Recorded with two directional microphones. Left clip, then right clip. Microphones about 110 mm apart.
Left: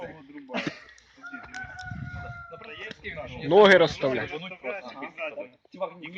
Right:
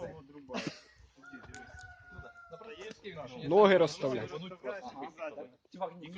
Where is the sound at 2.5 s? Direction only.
40° right (ahead or behind).